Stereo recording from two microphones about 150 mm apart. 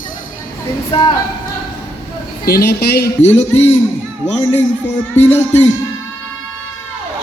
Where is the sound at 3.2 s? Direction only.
45° left (ahead or behind).